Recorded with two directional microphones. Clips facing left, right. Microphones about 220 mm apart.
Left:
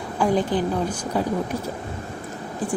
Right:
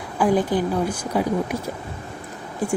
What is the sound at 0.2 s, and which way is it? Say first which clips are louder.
Speech: right 2 dB; 5° right (ahead or behind).